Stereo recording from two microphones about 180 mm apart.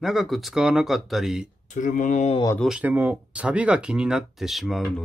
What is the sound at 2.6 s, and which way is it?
Speech, 5° right (ahead or behind).